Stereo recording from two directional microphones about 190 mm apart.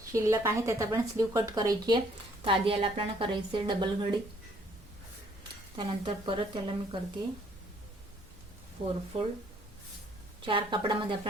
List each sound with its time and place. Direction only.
0.1 s a woman's voice: 15° right (ahead or behind)
5.4 s speech: 25° right (ahead or behind)
8.8 s a woman's voice: 30° right (ahead or behind)
10.4 s a woman's voice: 25° right (ahead or behind)